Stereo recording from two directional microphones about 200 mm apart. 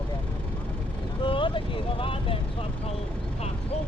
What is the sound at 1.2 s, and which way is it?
Speech, 25° left (ahead or behind).